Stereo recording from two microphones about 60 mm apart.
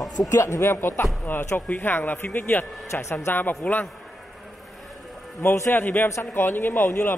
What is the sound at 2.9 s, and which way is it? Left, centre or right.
Speech, left.